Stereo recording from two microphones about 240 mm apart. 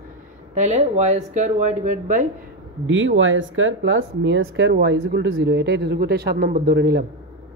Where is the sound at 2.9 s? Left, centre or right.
Right.